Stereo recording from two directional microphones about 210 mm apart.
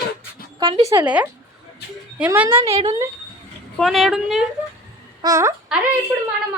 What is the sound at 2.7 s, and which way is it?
Speech, 30° right (ahead or behind).